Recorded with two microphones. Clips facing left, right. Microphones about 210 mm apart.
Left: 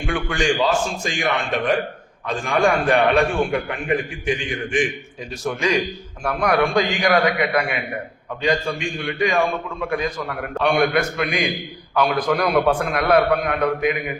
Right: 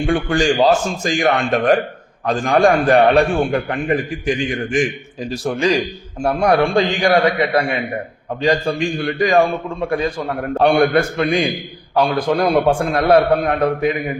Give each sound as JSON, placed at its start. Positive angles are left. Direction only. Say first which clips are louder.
{"t": 0.0, "sound": "a man's voice", "louder": "right 6 dB", "side_deg": -35}